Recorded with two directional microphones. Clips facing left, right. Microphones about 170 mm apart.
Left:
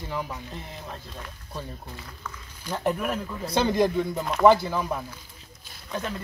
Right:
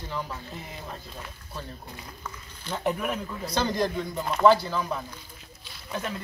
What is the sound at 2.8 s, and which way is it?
Speech, centre (ahead or behind).